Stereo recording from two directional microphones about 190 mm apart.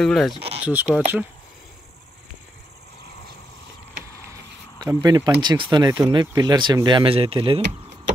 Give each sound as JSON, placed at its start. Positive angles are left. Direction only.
{"t": 0.0, "sound": "speech", "side_deg": 0}
{"t": 4.7, "sound": "speech", "side_deg": -20}